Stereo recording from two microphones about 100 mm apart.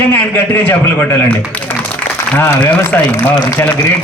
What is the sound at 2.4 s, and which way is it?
A man's voice, 20° left (ahead or behind).